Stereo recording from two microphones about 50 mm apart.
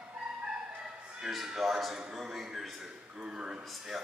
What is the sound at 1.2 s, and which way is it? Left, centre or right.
A man's voice, centre.